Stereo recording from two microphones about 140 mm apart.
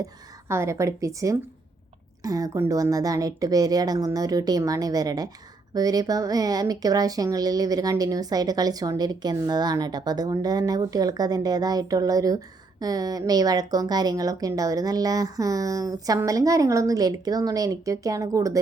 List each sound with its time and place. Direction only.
0.0 s a woman's voice: 20° right (ahead or behind)